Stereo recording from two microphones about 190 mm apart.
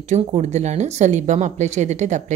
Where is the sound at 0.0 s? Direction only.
40° right (ahead or behind).